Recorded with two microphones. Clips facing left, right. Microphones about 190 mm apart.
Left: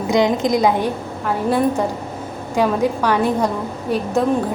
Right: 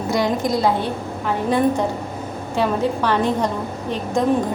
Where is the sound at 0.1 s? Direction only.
20° left (ahead or behind).